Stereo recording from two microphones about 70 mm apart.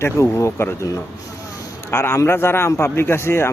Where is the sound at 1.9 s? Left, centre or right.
Left.